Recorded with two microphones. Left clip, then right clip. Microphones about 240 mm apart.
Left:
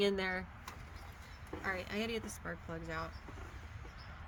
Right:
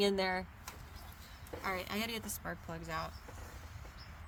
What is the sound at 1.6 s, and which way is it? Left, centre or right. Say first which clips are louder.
Speech: right 1 dB; right.